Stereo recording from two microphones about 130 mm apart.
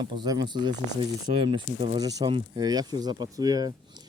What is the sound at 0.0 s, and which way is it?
Speech, 35° right (ahead or behind).